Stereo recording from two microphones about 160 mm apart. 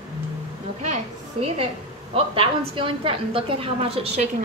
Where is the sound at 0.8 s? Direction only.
45° right (ahead or behind).